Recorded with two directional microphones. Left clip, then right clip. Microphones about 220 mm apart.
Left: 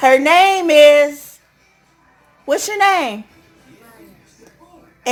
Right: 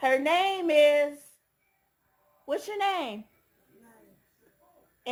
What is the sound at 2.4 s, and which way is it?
Speech, 5° left (ahead or behind).